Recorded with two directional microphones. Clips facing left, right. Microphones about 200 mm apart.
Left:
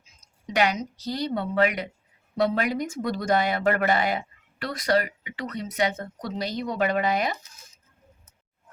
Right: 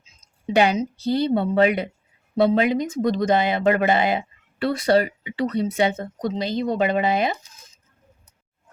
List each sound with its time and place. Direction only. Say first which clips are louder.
0.0 s speech: right 9 dB; 30° right (ahead or behind)